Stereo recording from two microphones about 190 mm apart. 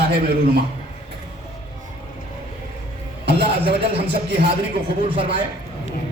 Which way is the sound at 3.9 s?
60° right (ahead or behind).